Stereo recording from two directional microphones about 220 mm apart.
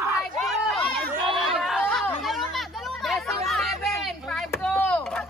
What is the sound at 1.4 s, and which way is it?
Chatter, centre (ahead or behind).